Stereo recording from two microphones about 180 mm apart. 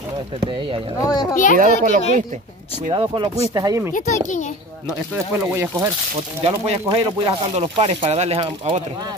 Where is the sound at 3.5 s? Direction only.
20° right (ahead or behind).